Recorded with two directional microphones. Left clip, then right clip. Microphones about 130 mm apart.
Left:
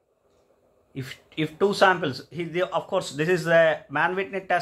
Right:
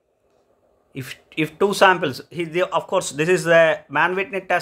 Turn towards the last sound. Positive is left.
turn(degrees=-45)  # may be behind; listen again after turning